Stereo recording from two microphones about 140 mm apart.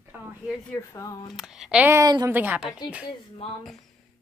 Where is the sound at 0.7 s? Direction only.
25° left (ahead or behind).